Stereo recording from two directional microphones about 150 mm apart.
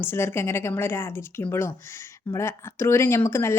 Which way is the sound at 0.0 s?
15° left (ahead or behind).